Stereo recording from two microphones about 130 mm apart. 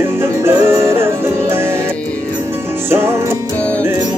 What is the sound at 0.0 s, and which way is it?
Music, 20° right (ahead or behind).